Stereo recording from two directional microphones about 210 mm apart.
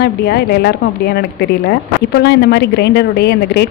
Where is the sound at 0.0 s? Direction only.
50° left (ahead or behind).